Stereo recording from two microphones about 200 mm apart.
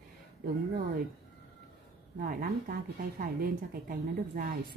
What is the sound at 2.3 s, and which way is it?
A woman's voice, 45° right (ahead or behind).